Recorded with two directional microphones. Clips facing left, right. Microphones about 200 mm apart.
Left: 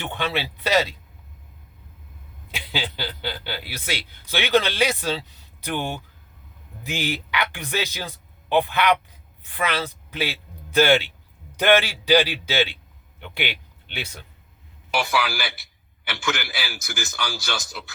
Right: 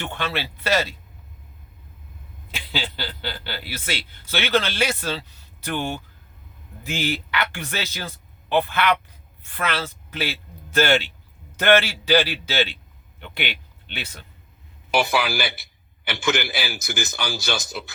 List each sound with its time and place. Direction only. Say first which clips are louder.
0.0 s a man's voice: left 1 dB; 15° left (ahead or behind)
2.5 s a man's voice: even; 15° left (ahead or behind)
13.8 s a man's voice: left 1 dB; 10° left (ahead or behind)
14.9 s a man's voice: right 3 dB; 20° right (ahead or behind)